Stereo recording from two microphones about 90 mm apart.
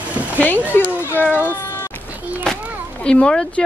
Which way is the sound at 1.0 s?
20° left (ahead or behind).